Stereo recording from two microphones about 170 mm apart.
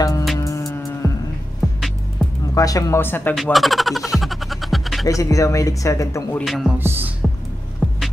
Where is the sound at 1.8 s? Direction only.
Centre (ahead or behind).